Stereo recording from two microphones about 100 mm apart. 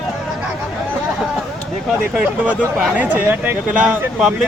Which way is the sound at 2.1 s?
15° right (ahead or behind).